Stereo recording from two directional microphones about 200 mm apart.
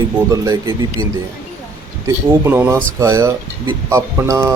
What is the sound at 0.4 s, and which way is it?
Speech, 15° right (ahead or behind).